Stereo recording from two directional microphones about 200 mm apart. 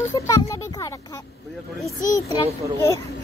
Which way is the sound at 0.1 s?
15° left (ahead or behind).